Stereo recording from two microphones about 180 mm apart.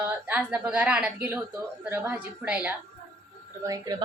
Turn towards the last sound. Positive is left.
turn(degrees=-20)  # may be behind; listen again after turning